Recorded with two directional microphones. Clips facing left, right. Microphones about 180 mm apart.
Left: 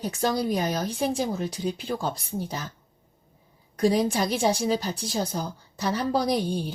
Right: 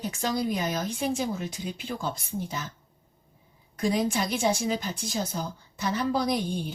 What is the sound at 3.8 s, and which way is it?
A woman's voice, 35° left (ahead or behind).